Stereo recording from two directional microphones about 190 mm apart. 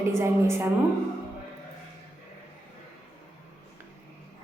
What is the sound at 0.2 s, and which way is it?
Speech, 15° right (ahead or behind).